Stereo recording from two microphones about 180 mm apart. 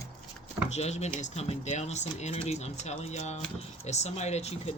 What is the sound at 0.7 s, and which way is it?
Speech, 40° left (ahead or behind).